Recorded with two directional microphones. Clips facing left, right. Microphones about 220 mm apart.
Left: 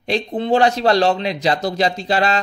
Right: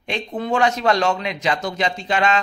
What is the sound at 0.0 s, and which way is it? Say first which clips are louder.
A man's voice: left 5 dB; 35° left (ahead or behind).